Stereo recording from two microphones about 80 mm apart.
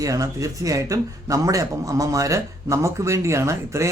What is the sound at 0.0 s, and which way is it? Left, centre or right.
Speech, right.